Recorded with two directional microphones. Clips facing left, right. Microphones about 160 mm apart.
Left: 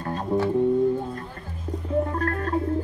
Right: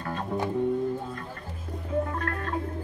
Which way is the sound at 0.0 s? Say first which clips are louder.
Left 3 dB; 35° left (ahead or behind).